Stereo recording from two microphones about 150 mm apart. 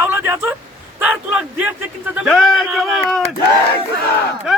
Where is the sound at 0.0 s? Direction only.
15° right (ahead or behind); by 3.2 s centre (ahead or behind).